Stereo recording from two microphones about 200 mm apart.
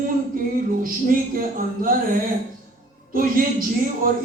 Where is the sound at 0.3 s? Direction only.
45° right (ahead or behind).